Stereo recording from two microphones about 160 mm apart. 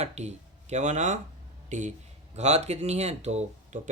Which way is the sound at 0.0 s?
45° right (ahead or behind).